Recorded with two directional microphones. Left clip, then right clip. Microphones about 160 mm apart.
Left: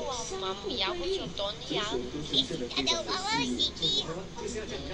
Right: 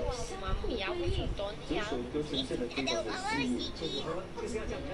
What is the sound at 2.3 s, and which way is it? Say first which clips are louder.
Speech: left 5 dB; 15° left (ahead or behind).